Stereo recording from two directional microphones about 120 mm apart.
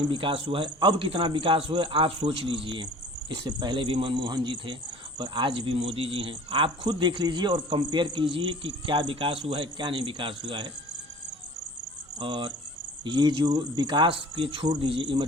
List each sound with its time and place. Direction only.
0.0 s a man's voice: 45° right (ahead or behind)
12.2 s a man's voice: 40° right (ahead or behind)